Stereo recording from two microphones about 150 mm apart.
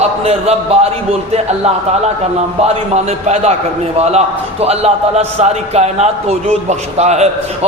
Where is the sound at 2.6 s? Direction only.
45° right (ahead or behind).